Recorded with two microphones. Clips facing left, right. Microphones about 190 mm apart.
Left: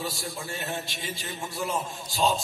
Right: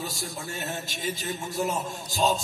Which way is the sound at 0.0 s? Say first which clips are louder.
Left 1 dB; 45° right (ahead or behind).